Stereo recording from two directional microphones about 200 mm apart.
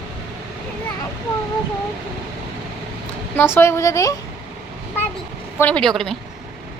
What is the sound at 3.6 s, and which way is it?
Speech, 15° left (ahead or behind).